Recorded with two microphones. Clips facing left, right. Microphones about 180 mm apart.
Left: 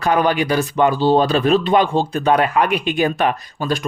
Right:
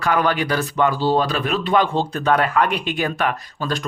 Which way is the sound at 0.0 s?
20° left (ahead or behind).